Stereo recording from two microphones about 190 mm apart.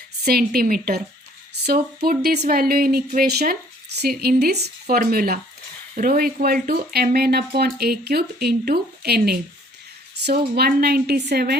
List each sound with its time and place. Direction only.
0.3 s speech: 50° right (ahead or behind)